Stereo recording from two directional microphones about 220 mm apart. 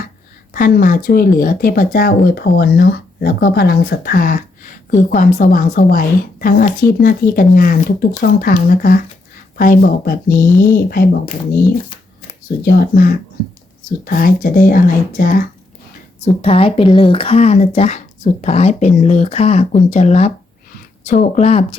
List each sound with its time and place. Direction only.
0.5 s speech: 40° left (ahead or behind)
12.6 s speech: 45° left (ahead or behind)
16.2 s a woman's voice: 25° left (ahead or behind)